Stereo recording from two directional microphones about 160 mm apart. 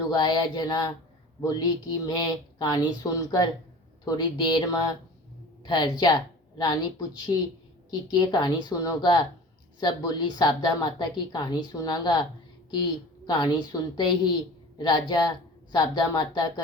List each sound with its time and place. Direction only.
0.0 s speech: 25° left (ahead or behind)
7.9 s speech: 25° left (ahead or behind)
13.2 s speech: 25° left (ahead or behind)